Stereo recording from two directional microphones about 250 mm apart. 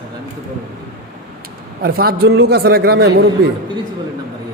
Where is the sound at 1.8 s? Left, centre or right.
Right.